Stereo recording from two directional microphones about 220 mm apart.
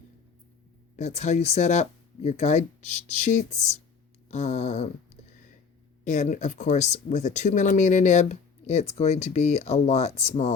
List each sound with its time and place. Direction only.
0.9 s speech: 30° left (ahead or behind)